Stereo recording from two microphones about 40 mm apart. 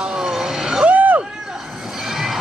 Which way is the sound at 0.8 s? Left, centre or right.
Right.